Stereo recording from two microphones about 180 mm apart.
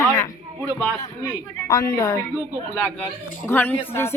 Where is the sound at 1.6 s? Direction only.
20° left (ahead or behind).